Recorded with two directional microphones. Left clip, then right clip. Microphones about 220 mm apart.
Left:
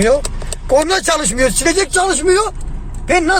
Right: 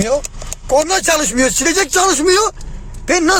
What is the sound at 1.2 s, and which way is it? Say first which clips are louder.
Speech: even; 50° right (ahead or behind).